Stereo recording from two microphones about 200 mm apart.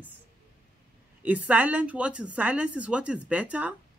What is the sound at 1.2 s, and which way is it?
Speech, 5° right (ahead or behind).